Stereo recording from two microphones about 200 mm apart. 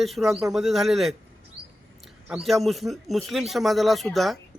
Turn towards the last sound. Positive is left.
turn(degrees=0)  # may be behind; listen again after turning